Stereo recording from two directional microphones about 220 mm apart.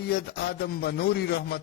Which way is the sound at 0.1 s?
45° left (ahead or behind).